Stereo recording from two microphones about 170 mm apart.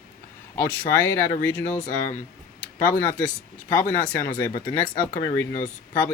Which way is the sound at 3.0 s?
15° left (ahead or behind).